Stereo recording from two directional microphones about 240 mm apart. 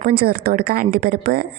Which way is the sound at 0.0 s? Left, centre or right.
Right.